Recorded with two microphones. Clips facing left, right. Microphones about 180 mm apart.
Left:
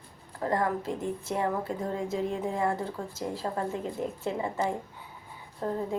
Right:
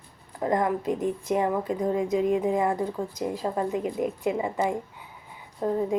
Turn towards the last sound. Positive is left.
turn(degrees=-15)  # may be behind; listen again after turning